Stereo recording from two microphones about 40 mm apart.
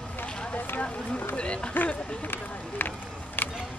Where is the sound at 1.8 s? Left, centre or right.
Left.